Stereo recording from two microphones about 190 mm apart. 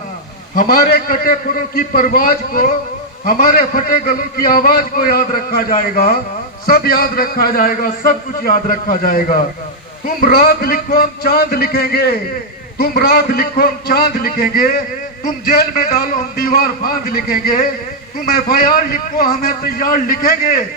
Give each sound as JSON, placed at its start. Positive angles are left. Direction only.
{"t": 0.5, "sound": "a man's voice", "side_deg": 50}